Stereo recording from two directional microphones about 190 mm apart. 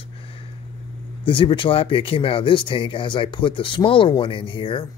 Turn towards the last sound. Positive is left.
turn(degrees=25)  # may be behind; listen again after turning